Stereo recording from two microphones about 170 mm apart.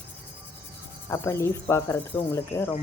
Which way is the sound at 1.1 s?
15° left (ahead or behind).